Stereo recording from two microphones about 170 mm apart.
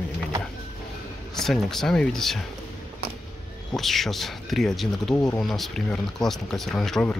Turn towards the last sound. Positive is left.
turn(degrees=5)  # may be behind; listen again after turning